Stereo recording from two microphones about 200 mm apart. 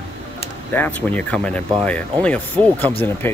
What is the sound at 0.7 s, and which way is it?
Speech, 10° left (ahead or behind).